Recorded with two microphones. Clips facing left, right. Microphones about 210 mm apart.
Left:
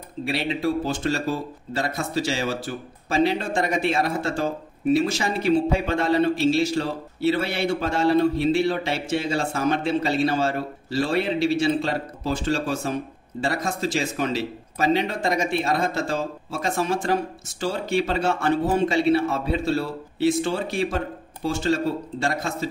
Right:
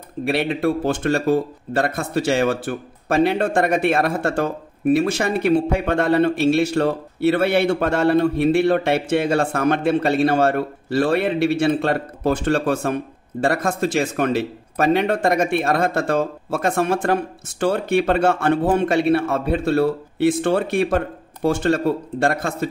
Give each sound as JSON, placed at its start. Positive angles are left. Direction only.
{"t": 0.2, "sound": "speech", "side_deg": -55}